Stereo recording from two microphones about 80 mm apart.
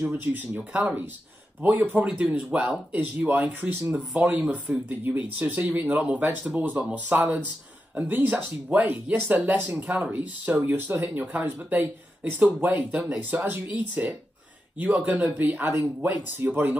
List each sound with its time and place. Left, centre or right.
0.0 s speech: right
13.3 s speech: right